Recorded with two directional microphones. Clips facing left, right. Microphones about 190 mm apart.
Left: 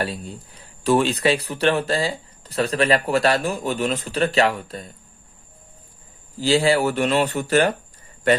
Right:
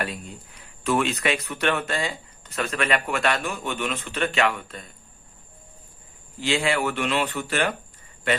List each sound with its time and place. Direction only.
0.0 s speech: 35° left (ahead or behind)
6.4 s speech: 35° left (ahead or behind)